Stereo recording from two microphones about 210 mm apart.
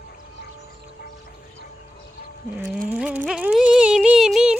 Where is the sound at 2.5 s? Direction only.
10° right (ahead or behind).